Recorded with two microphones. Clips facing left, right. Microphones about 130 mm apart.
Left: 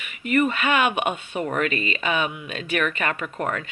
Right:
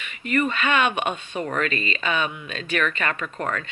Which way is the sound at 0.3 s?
15° left (ahead or behind).